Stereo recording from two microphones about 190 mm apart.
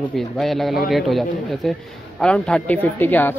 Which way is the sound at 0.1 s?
Centre (ahead or behind).